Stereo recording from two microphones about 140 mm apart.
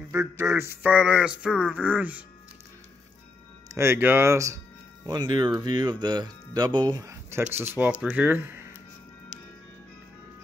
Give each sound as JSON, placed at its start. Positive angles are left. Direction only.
{"t": 0.1, "sound": "speech", "side_deg": -15}
{"t": 3.7, "sound": "speech", "side_deg": -15}